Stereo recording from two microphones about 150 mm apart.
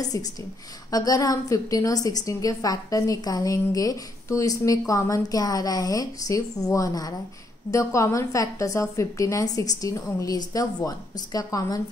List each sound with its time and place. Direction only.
0.1 s a woman's voice: 20° left (ahead or behind)